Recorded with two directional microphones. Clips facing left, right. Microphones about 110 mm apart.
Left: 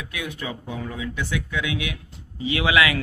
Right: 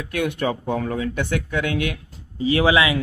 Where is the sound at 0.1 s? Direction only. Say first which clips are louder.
Right 11 dB; 60° right (ahead or behind).